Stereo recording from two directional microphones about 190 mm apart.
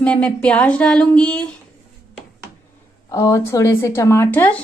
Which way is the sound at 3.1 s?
15° left (ahead or behind).